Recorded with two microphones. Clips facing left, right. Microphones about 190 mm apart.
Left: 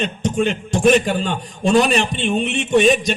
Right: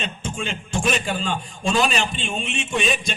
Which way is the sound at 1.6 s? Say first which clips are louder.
Left 7 dB; 60° left (ahead or behind).